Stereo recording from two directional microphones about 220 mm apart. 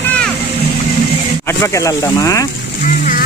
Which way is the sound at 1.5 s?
15° left (ahead or behind).